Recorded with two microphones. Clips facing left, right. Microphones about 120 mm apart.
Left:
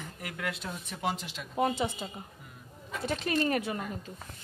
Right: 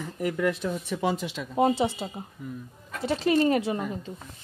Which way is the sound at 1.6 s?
30° right (ahead or behind).